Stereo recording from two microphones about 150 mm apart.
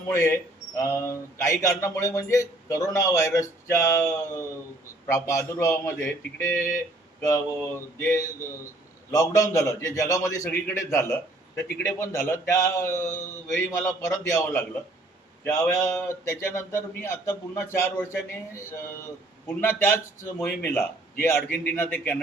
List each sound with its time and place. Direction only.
0.1 s a man's voice: 20° left (ahead or behind)
6.6 s speech: 65° left (ahead or behind)
7.2 s a man's voice: 20° left (ahead or behind)